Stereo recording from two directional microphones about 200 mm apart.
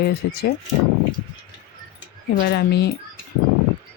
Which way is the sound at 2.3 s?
50° left (ahead or behind).